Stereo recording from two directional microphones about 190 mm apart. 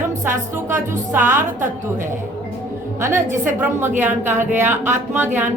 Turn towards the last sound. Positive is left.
turn(degrees=-10)  # may be behind; listen again after turning